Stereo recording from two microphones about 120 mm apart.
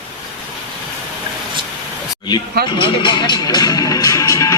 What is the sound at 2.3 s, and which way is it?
Speech, 45° left (ahead or behind).